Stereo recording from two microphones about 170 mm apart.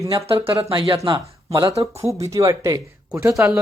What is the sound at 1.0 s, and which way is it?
Speech, 20° right (ahead or behind).